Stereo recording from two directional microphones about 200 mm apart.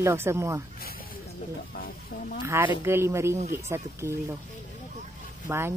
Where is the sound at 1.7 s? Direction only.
45° left (ahead or behind).